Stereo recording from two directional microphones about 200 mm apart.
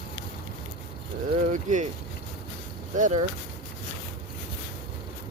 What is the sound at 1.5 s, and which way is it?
Speech, 35° right (ahead or behind).